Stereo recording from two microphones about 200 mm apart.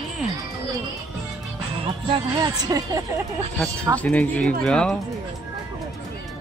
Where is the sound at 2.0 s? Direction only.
20° right (ahead or behind).